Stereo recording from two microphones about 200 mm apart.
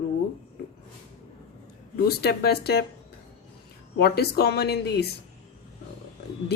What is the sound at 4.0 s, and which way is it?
Speech, 55° left (ahead or behind).